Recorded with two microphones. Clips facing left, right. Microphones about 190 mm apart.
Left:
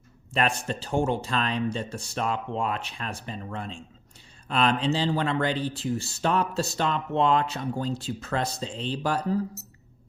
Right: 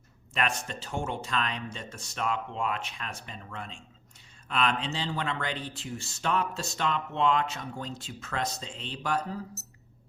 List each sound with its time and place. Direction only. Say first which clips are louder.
0.3 s speech: left 5 dB; 35° left (ahead or behind)